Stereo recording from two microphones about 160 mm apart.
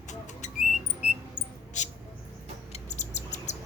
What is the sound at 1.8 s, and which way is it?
Mouse, 50° left (ahead or behind).